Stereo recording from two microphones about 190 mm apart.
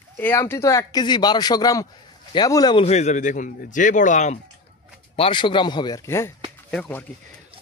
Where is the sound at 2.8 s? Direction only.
35° left (ahead or behind).